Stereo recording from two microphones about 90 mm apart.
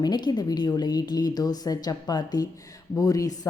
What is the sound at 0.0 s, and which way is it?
A woman's voice, 55° left (ahead or behind).